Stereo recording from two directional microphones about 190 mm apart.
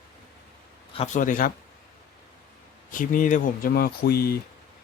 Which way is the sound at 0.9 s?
40° left (ahead or behind).